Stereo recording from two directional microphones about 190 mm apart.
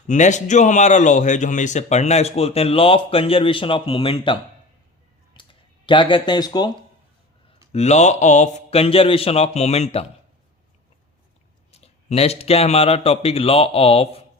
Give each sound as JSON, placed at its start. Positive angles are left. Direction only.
{"t": 0.1, "sound": "a man's voice", "side_deg": 40}
{"t": 5.3, "sound": "a sound", "side_deg": 25}
{"t": 7.7, "sound": "a man's voice", "side_deg": 35}
{"t": 11.7, "sound": "a man's voice", "side_deg": 35}